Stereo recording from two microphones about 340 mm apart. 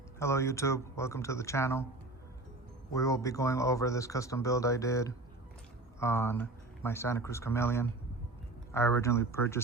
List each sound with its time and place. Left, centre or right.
0.2 s speech: centre
2.9 s speech: centre